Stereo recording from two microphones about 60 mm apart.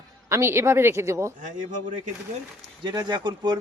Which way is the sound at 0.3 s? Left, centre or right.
Right.